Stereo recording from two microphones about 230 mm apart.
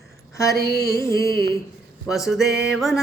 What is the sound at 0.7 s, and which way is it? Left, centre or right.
Music, left.